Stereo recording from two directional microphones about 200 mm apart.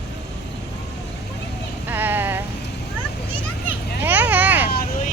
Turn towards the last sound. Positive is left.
turn(degrees=50)  # may be behind; listen again after turning